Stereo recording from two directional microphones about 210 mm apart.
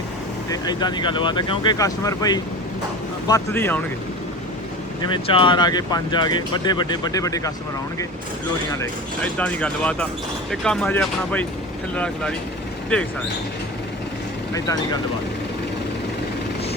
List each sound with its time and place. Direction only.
0.5 s speech: 20° left (ahead or behind)
5.1 s speech: 25° left (ahead or behind)
8.7 s speech: 10° left (ahead or behind)